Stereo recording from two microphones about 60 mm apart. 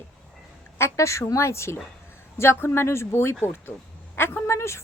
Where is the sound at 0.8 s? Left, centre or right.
Left.